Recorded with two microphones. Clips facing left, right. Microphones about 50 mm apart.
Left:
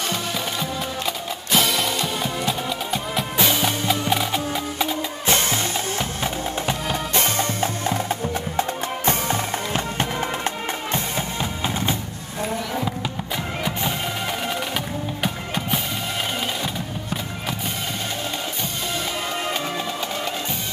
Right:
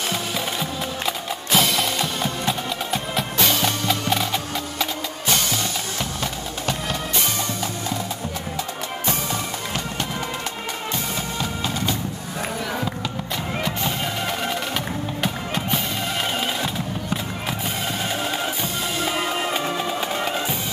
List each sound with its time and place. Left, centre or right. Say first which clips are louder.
1.5 s music: even; centre
5.3 s music: left 2 dB; left
6.2 s music: left 4 dB; left
7.2 s music: left 3 dB; left
11.6 s music: left 2 dB; left
15.2 s music: right 1 dB; centre